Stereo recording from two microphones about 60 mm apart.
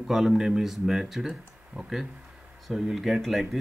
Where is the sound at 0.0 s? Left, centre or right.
Centre.